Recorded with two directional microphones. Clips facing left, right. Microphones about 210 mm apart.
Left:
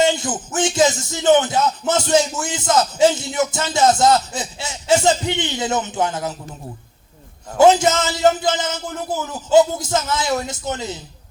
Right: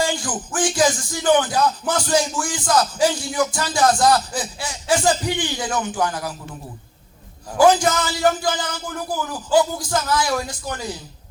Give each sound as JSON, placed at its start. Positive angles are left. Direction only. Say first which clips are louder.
{"t": 0.0, "sound": "music", "louder": "left 5 dB", "side_deg": 25}
{"t": 7.6, "sound": "music", "louder": "left 2 dB", "side_deg": 25}